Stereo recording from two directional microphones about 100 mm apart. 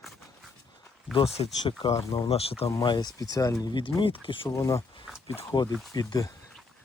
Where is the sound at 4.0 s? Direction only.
60° left (ahead or behind).